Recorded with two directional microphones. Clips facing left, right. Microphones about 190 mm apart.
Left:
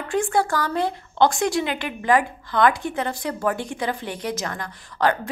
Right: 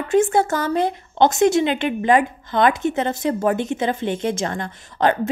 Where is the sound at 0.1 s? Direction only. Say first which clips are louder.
Right 5 dB; 20° right (ahead or behind).